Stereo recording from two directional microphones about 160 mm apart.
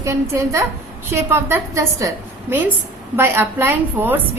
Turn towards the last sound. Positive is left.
turn(degrees=-15)  # may be behind; listen again after turning